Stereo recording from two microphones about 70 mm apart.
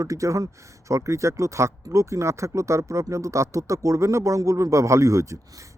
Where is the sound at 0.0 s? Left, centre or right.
Right.